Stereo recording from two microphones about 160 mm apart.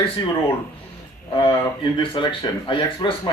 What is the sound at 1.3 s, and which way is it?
Speech, 30° left (ahead or behind).